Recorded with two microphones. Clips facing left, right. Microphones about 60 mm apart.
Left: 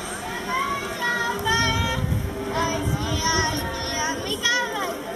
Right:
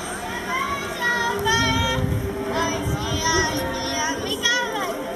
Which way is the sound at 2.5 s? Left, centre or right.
Centre.